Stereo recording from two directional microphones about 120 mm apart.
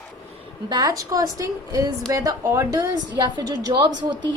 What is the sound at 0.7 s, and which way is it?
A woman's voice, 35° right (ahead or behind).